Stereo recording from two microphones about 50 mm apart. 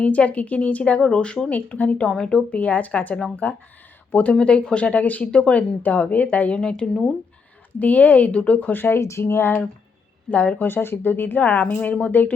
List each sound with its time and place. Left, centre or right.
0.0 s speech: left
1.5 s speech: left
2.0 s a woman's voice: centre
2.5 s speech: left
6.6 s a woman's voice: centre
7.7 s speech: left
8.7 s speech: left
9.0 s speech: left
9.2 s speech: left
10.2 s speech: left
10.7 s speech: left
11.3 s speech: left